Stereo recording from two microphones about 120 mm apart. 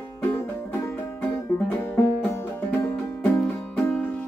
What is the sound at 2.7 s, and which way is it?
Music, 10° left (ahead or behind).